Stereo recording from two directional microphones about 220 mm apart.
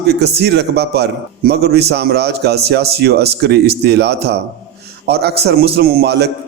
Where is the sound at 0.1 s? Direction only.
50° right (ahead or behind).